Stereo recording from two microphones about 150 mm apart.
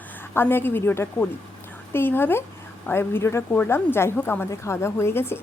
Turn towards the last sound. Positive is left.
turn(degrees=15)  # may be behind; listen again after turning